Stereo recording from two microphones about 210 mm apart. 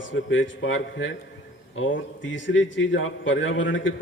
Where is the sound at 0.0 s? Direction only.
65° left (ahead or behind).